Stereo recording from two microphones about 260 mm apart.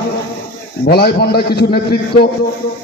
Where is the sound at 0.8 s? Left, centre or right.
Left.